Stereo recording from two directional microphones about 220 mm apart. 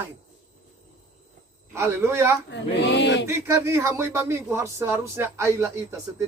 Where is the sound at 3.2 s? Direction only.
15° right (ahead or behind).